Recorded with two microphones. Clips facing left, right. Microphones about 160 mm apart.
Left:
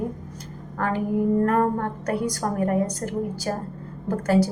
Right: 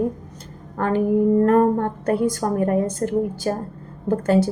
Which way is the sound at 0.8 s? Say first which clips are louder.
Right 5 dB; 30° right (ahead or behind).